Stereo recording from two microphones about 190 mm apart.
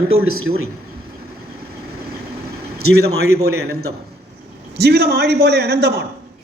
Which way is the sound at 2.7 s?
90° right.